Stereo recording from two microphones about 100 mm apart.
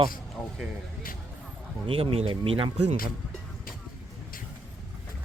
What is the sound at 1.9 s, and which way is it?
Speech, 70° right (ahead or behind).